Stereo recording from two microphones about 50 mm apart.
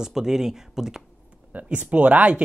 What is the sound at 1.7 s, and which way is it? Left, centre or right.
Speech, right.